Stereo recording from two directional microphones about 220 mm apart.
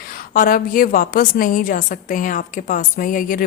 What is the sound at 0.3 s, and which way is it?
Speech, 40° left (ahead or behind).